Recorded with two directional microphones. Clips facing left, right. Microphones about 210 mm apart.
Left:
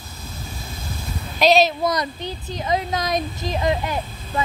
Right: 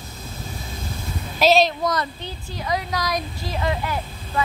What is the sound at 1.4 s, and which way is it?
Speech, centre (ahead or behind).